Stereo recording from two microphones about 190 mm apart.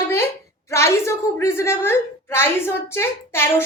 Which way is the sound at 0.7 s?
15° left (ahead or behind).